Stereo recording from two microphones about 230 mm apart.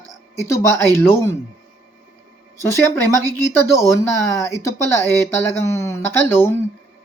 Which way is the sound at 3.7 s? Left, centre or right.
Centre.